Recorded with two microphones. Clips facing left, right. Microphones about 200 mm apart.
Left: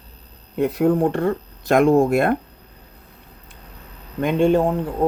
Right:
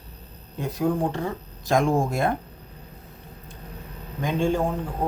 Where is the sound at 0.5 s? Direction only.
65° left (ahead or behind).